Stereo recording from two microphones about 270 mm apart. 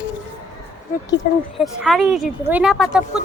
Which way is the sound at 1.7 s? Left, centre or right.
Centre.